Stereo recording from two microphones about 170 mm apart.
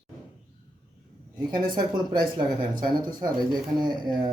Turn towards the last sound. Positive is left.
turn(degrees=-25)  # may be behind; listen again after turning